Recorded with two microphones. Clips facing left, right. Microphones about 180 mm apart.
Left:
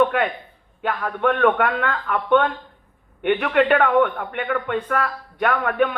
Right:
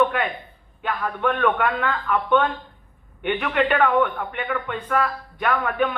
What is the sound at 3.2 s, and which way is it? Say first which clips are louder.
A man's voice: left 4 dB; 65° left (ahead or behind).